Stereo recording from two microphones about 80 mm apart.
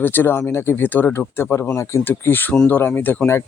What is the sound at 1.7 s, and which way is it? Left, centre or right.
Speech, left.